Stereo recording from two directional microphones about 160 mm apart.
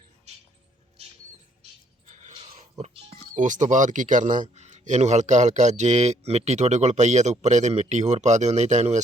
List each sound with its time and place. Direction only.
0.3 s music: 45° right (ahead or behind)
1.0 s rodents: 40° right (ahead or behind)
2.0 s a sound: 50° right (ahead or behind)
2.3 s speech: 40° right (ahead or behind)